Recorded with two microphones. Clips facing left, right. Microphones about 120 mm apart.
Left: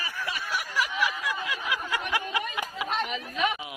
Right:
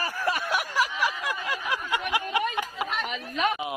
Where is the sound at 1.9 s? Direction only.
20° right (ahead or behind).